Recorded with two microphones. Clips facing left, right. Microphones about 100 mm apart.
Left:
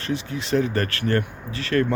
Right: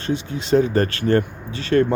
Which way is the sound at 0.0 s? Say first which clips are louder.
Right 3 dB; 25° right (ahead or behind).